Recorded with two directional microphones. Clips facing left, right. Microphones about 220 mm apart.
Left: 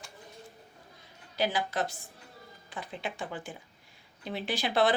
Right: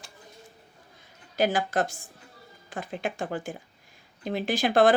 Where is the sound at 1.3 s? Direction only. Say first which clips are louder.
Right 5 dB; 50° right (ahead or behind).